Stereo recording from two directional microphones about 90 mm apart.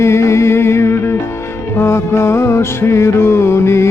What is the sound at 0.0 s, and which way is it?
Music, 30° left (ahead or behind).